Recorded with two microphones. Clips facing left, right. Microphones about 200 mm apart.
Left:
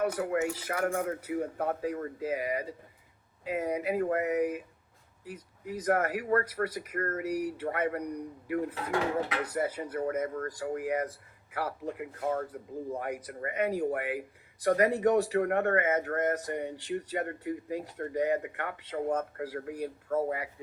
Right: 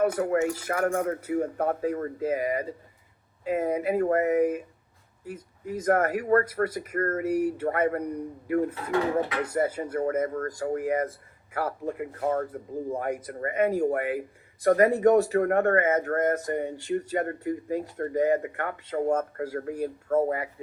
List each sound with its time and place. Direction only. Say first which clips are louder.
0.0 s speech: right 5 dB; 50° right (ahead or behind)